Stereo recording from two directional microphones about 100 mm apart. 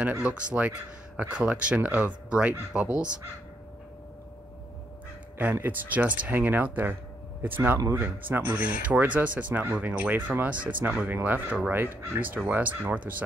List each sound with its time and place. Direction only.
0.0 s speech: 10° right (ahead or behind)
5.4 s speech: 15° right (ahead or behind)